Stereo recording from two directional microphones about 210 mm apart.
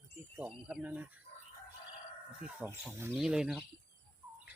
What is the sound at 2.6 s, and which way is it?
Speech, 10° right (ahead or behind).